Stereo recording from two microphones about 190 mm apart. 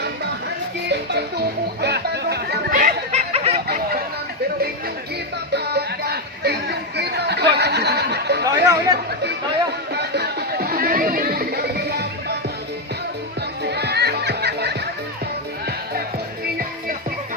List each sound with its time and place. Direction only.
0.9 s music: 60° right (ahead or behind); by 3.6 s 35° right (ahead or behind)
5.5 s music: 60° right (ahead or behind)
8.6 s chatter: 20° right (ahead or behind)
9.9 s music: 60° right (ahead or behind)
13.7 s music: 60° right (ahead or behind)